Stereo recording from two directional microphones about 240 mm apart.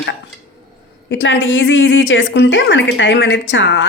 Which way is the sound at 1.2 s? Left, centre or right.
Left.